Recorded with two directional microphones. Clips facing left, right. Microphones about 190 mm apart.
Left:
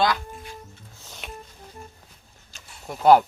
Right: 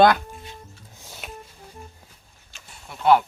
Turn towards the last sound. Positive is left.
turn(degrees=40)  # may be behind; listen again after turning